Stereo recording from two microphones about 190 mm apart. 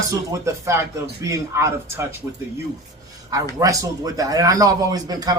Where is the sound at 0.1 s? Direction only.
15° right (ahead or behind).